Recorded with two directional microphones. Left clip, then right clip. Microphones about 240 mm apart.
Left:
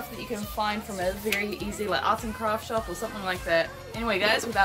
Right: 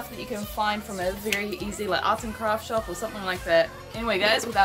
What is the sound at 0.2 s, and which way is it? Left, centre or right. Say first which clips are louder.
Speech: right 2 dB; centre.